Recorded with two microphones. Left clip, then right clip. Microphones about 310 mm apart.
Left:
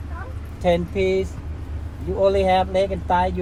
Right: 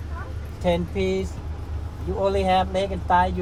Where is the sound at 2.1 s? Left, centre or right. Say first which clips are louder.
Left 3 dB; centre.